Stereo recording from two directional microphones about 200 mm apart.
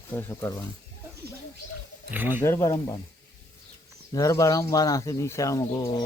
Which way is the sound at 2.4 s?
15° left (ahead or behind).